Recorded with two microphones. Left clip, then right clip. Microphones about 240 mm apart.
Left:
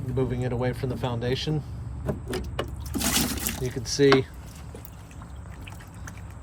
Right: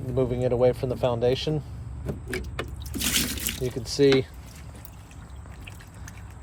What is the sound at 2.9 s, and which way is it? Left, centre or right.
Water, centre.